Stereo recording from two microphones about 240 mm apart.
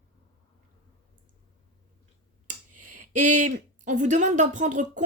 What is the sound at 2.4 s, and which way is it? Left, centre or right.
Speech, right.